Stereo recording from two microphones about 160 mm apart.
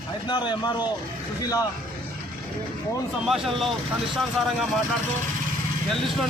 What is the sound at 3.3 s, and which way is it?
Speech, centre (ahead or behind).